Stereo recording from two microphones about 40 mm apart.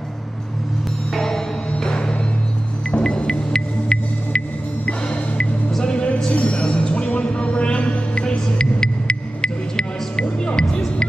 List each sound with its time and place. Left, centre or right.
1.1 s music: centre
6.3 s music: left